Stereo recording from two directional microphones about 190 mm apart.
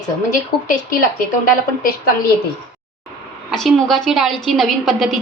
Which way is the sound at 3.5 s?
Centre (ahead or behind).